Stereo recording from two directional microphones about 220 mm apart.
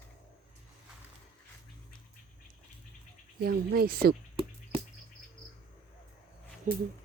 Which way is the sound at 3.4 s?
45° right (ahead or behind).